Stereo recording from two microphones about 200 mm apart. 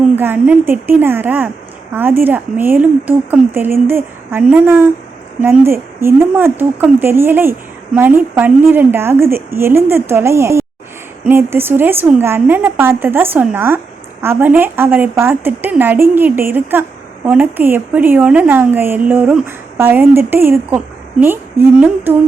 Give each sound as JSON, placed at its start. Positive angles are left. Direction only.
{"t": 0.2, "sound": "speech", "side_deg": -10}